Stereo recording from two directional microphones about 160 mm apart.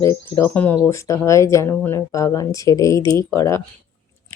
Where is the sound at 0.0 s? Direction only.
20° left (ahead or behind).